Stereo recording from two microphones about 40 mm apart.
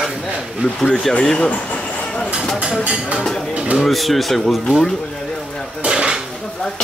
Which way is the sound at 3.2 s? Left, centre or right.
Centre.